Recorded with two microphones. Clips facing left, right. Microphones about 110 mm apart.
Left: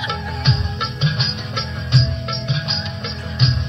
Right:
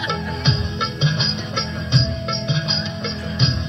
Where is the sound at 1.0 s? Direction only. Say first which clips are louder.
Even; centre (ahead or behind).